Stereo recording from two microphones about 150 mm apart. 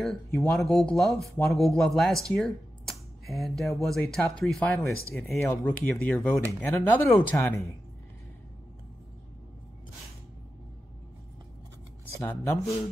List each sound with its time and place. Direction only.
0.0 s speech: 5° left (ahead or behind)
5.4 s speech: 20° left (ahead or behind)
12.2 s speech: 20° left (ahead or behind)